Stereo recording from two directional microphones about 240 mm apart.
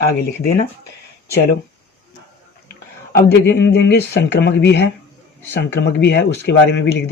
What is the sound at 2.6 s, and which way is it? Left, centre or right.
Speech, left.